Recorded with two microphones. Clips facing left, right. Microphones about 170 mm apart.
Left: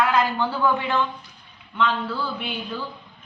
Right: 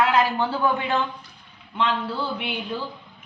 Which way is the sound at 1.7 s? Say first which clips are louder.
Left 1 dB; 20° right (ahead or behind).